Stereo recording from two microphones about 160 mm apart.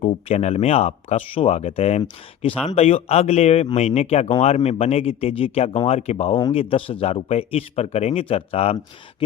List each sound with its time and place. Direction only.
0.0 s speech: 40° left (ahead or behind)